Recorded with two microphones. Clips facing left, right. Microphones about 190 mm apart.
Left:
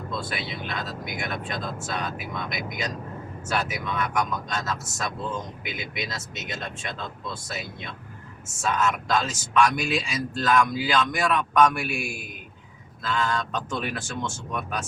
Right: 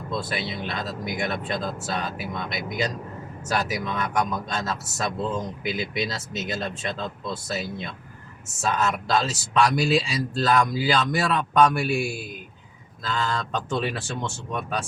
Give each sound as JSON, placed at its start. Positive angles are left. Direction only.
{"t": 0.2, "sound": "a man's voice", "side_deg": -35}
{"t": 13.1, "sound": "a man's voice", "side_deg": -35}